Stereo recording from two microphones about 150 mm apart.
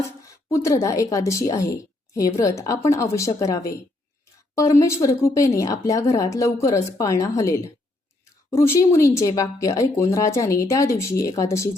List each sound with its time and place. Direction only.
0.4 s a woman's voice: 20° left (ahead or behind)